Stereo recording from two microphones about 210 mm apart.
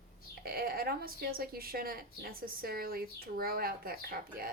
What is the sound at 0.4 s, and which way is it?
A woman's voice, 45° right (ahead or behind).